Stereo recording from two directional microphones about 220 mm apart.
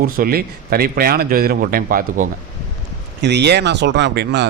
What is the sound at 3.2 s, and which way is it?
A man's voice, 50° right (ahead or behind).